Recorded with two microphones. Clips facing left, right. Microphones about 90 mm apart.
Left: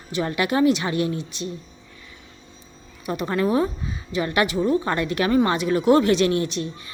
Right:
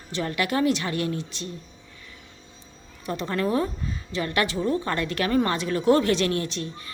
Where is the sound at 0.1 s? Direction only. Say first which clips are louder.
Left 3 dB; 20° left (ahead or behind).